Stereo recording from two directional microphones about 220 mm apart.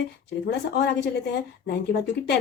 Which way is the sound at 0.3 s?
50° left (ahead or behind).